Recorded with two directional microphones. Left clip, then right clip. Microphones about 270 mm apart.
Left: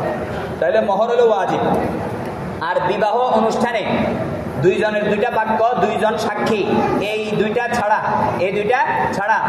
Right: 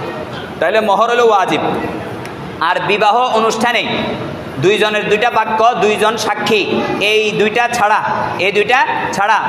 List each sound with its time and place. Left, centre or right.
0.6 s a man's voice: right
2.6 s a man's voice: right